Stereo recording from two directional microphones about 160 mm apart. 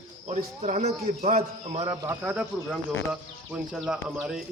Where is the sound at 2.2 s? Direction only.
10° right (ahead or behind).